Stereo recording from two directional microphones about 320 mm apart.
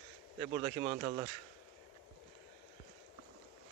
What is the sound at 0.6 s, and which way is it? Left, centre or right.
Speech, centre.